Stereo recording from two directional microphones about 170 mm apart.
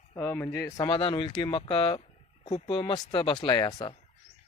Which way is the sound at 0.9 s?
30° left (ahead or behind).